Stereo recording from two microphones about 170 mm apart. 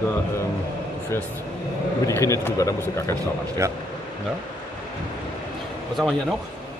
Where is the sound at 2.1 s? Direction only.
20° left (ahead or behind).